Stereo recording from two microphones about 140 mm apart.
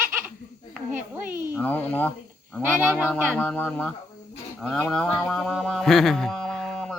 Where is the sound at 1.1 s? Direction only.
10° right (ahead or behind).